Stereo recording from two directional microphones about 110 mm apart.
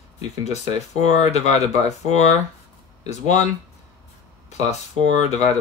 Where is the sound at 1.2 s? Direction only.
80° left.